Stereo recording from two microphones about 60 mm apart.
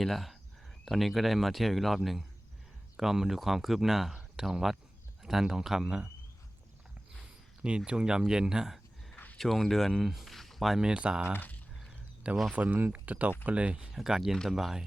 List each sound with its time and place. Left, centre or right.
0.0 s speech: centre
7.9 s speech: centre
9.1 s a sound: left
9.4 s speech: centre
10.8 s speech: centre
11.3 s speech: left
12.5 s speech: right
13.9 s speech: centre